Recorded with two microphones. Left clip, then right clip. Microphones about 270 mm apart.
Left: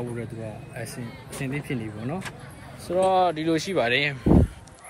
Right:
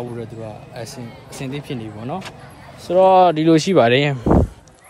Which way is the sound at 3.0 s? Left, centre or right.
Right.